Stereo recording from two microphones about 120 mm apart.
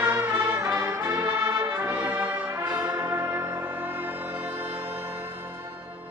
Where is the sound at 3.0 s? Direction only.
15° right (ahead or behind).